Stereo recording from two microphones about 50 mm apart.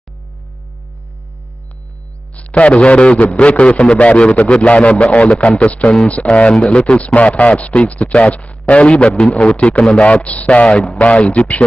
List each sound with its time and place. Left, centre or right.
2.3 s a man's voice: left